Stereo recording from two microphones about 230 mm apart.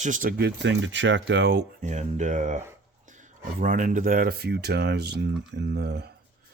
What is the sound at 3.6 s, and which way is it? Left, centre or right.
Speech, right.